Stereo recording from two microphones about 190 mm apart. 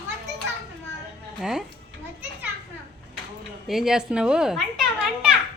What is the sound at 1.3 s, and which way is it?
Speech, 5° right (ahead or behind).